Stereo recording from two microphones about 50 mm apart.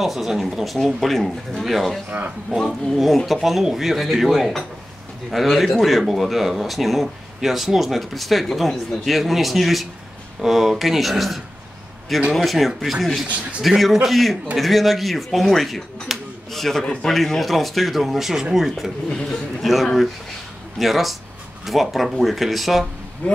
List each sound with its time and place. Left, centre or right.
0.0 s speech: centre
2.0 s a man's voice: right
2.6 s speech: centre
16.8 s a man's voice: centre
17.1 s a man's voice: centre
23.2 s a man's voice: left